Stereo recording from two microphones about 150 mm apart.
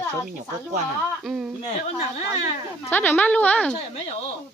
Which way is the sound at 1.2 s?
5° right (ahead or behind).